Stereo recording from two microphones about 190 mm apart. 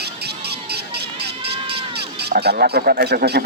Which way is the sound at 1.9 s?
60° right (ahead or behind).